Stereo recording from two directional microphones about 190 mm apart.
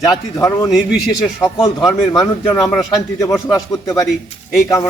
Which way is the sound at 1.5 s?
20° left (ahead or behind).